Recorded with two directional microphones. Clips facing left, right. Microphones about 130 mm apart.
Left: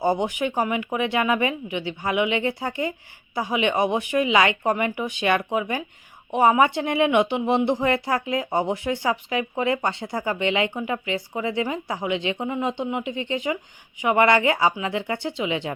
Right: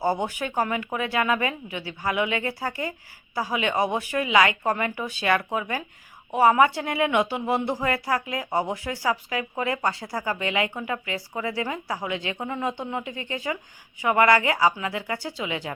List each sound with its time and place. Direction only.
0.0 s speech: 15° left (ahead or behind)